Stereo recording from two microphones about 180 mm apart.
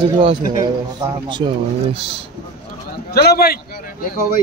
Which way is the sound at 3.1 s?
60° left (ahead or behind).